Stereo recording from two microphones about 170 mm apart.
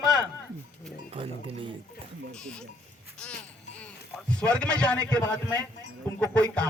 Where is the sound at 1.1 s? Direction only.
35° right (ahead or behind).